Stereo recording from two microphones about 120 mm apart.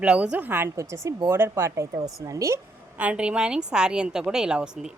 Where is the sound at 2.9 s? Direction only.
10° right (ahead or behind).